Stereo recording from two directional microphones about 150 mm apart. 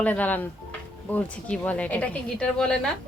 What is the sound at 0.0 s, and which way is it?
Speech, 10° left (ahead or behind).